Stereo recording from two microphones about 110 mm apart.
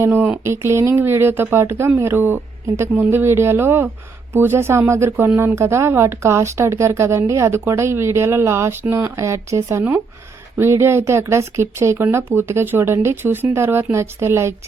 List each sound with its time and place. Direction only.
0.0 s speech: 20° right (ahead or behind)